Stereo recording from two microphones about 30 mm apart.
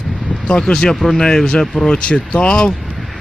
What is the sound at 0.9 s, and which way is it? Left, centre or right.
Speech, centre.